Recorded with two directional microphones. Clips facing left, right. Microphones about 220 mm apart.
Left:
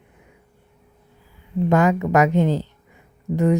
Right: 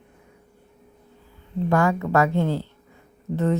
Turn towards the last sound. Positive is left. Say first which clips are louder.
# left 4 dB
turn(degrees=15)  # may be behind; listen again after turning